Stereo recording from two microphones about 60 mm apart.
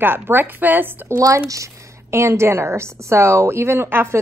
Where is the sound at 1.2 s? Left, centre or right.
Right.